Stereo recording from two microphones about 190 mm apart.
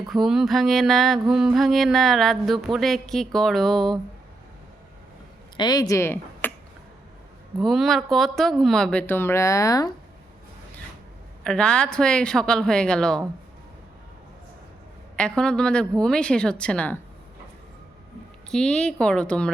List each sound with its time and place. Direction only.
0.1 s a woman's voice: centre (ahead or behind)
5.5 s speech: 20° left (ahead or behind)
7.6 s a woman's voice: centre (ahead or behind); by 9.9 s 20° left (ahead or behind)
11.4 s a woman's voice: 5° left (ahead or behind)
15.1 s a woman's voice: 5° left (ahead or behind)
18.5 s a woman's voice: 5° left (ahead or behind)